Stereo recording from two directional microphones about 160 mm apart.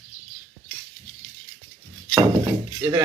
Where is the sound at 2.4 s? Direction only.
20° right (ahead or behind).